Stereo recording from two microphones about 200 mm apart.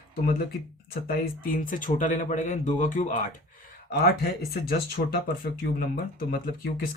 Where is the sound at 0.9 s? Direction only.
45° left (ahead or behind).